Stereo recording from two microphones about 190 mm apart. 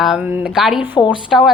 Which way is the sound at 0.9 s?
25° left (ahead or behind).